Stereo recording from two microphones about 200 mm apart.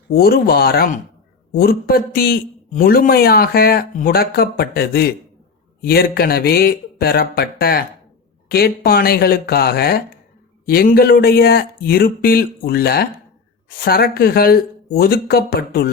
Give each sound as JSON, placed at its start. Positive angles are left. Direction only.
{"t": 0.1, "sound": "a man's voice", "side_deg": 50}